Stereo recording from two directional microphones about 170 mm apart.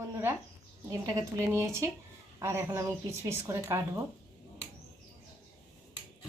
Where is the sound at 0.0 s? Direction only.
15° right (ahead or behind).